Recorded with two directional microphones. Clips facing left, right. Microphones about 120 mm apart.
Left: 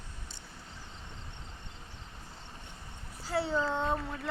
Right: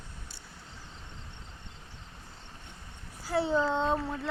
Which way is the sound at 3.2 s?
15° right (ahead or behind).